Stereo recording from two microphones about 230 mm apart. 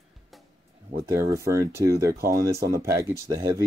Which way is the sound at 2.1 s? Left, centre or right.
Right.